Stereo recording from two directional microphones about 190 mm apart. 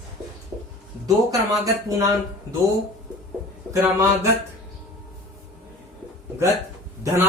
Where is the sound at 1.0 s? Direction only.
20° right (ahead or behind).